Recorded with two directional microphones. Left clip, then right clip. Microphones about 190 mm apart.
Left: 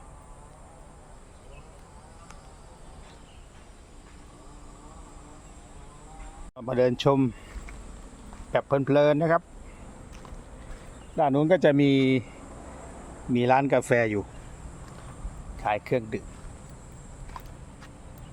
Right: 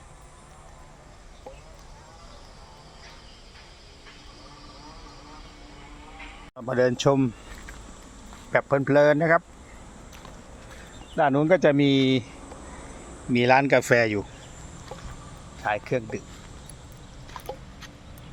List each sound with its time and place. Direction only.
6.6 s speech: 5° left (ahead or behind)
8.5 s speech: centre (ahead or behind)
11.2 s speech: 5° left (ahead or behind)
13.3 s speech: centre (ahead or behind)
15.6 s speech: 10° left (ahead or behind)